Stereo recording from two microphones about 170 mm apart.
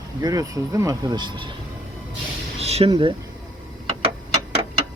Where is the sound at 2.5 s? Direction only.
35° right (ahead or behind).